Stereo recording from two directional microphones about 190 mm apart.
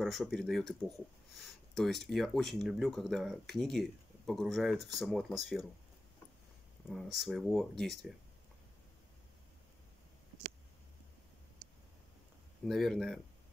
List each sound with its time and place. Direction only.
0.0 s speech: centre (ahead or behind)
6.9 s speech: centre (ahead or behind)
12.6 s speech: centre (ahead or behind)